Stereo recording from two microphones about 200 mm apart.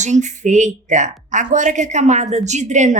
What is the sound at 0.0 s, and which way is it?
A woman's voice, 35° right (ahead or behind).